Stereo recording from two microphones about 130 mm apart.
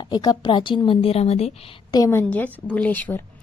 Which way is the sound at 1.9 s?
25° left (ahead or behind).